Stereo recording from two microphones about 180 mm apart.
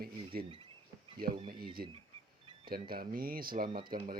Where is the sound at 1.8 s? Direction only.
55° right (ahead or behind).